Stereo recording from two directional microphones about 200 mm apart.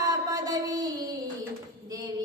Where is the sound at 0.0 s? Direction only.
20° right (ahead or behind).